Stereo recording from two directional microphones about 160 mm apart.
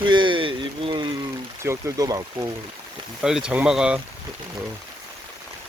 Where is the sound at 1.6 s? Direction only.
20° right (ahead or behind).